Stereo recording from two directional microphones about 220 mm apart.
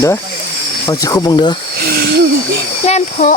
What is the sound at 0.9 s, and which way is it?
Speech, 15° left (ahead or behind).